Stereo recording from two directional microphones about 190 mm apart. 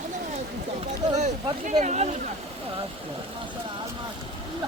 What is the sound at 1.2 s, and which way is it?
Speech, 40° right (ahead or behind).